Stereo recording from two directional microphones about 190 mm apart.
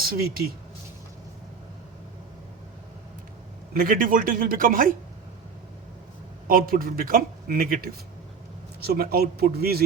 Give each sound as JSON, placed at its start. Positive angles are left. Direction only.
{"t": 0.1, "sound": "a man's voice", "side_deg": -50}
{"t": 3.8, "sound": "a man's voice", "side_deg": -45}
{"t": 6.5, "sound": "a man's voice", "side_deg": -50}